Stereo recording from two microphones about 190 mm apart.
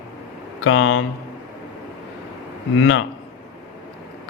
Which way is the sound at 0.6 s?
90° left.